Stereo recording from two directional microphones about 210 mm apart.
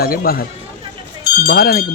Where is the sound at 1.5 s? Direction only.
45° left (ahead or behind).